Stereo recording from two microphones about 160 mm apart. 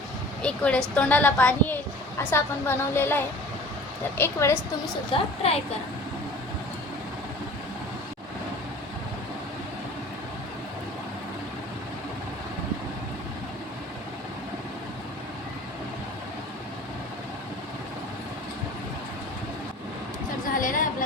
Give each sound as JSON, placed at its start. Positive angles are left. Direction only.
{"t": 0.4, "sound": "a woman's voice", "side_deg": 5}
{"t": 5.1, "sound": "speech", "side_deg": 40}
{"t": 20.6, "sound": "a sound", "side_deg": 55}